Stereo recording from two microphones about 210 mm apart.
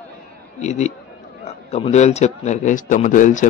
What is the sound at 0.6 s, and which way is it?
A man's voice, 35° left (ahead or behind).